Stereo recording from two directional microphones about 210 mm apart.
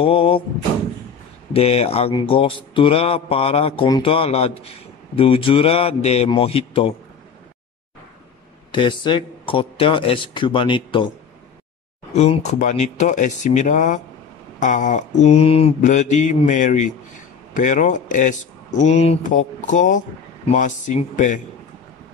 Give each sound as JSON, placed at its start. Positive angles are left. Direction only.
{"t": 0.0, "sound": "mantra", "side_deg": 25}
{"t": 1.5, "sound": "mantra", "side_deg": 30}
{"t": 8.7, "sound": "mantra", "side_deg": 20}
{"t": 12.2, "sound": "speech", "side_deg": 30}